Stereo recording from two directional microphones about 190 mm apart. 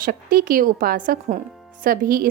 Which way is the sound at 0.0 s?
50° right (ahead or behind).